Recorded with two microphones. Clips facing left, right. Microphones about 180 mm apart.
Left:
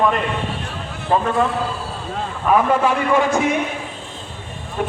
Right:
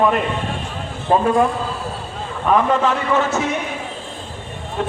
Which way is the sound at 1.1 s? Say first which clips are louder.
Right 2 dB; 30° right (ahead or behind).